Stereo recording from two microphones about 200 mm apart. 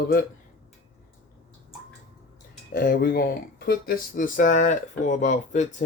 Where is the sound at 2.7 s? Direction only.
50° left (ahead or behind).